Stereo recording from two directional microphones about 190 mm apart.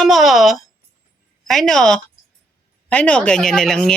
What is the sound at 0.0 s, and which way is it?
A woman's voice, centre (ahead or behind).